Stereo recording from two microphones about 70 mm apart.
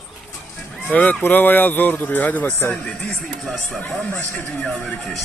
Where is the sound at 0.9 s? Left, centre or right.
Left.